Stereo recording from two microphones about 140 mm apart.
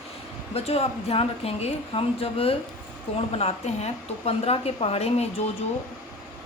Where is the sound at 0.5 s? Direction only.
45° left (ahead or behind).